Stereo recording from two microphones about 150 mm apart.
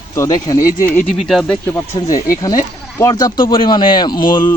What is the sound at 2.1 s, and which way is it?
Speech, 65° left (ahead or behind).